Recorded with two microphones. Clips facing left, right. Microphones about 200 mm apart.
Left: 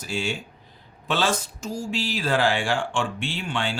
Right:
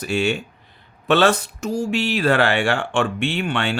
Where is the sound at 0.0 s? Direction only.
65° right (ahead or behind).